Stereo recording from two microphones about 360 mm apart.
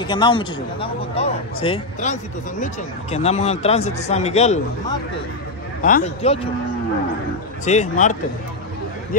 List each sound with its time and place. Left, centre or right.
0.0 s a man's voice: centre
5.8 s a man's voice: left
7.6 s speech: centre